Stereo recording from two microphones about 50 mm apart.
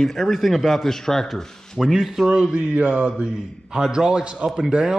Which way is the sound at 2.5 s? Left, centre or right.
Right.